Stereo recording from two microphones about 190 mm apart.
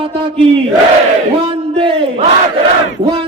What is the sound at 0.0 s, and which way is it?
Battle cry, 30° right (ahead or behind).